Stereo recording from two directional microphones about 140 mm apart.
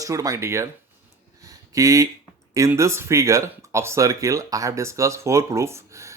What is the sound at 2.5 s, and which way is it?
Speech, 20° right (ahead or behind).